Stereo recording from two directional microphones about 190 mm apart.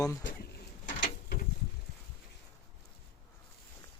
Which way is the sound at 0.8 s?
45° left (ahead or behind).